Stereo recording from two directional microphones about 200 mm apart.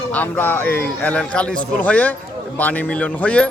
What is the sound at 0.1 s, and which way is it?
Speech, 10° left (ahead or behind).